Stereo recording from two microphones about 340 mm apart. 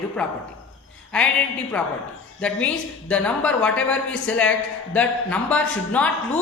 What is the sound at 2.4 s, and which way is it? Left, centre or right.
A man's voice, centre.